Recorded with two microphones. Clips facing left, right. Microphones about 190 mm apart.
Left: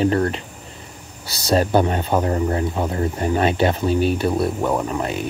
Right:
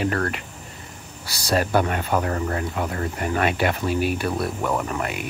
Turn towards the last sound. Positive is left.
turn(degrees=25)  # may be behind; listen again after turning